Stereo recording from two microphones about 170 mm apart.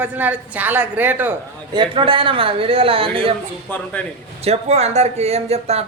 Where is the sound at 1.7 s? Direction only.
30° right (ahead or behind).